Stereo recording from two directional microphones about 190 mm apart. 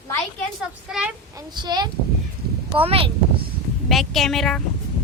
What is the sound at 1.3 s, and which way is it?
A woman's voice, 20° right (ahead or behind).